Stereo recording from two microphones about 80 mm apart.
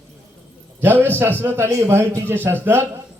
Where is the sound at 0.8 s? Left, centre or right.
Right.